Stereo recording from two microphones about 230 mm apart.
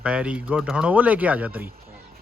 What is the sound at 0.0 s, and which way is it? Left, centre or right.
A man's voice, centre.